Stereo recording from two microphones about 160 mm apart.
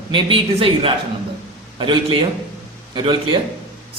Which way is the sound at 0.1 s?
35° right (ahead or behind).